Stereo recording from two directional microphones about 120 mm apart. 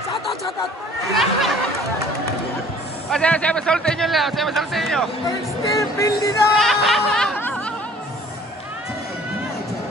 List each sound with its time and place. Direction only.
1.1 s a sound: centre (ahead or behind)
3.1 s speech: 10° left (ahead or behind)
5.8 s speech: 25° left (ahead or behind)
6.6 s music: centre (ahead or behind)
7.3 s music: 15° left (ahead or behind)